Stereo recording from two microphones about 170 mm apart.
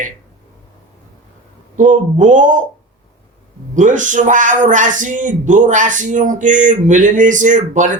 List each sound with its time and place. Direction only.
1.7 s speech: 50° right (ahead or behind)
3.8 s speech: 50° right (ahead or behind)